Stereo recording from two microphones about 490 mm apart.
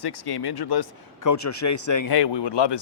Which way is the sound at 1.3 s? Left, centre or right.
Left.